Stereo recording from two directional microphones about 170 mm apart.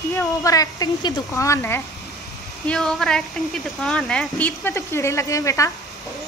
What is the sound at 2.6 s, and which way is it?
A woman's voice, 5° left (ahead or behind).